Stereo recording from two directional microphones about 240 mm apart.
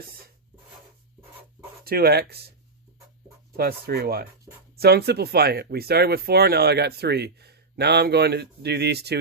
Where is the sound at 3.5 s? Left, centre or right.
Right.